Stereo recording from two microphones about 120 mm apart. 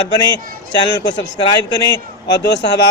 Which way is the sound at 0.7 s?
35° left (ahead or behind).